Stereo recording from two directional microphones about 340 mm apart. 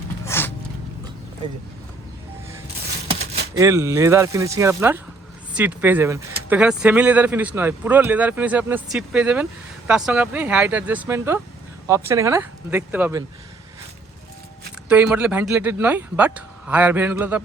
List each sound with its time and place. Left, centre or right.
0.3 s a sound: centre
3.5 s speech: centre
14.8 s speech: centre